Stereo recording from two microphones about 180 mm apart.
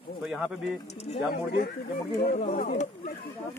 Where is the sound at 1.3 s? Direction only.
60° left (ahead or behind).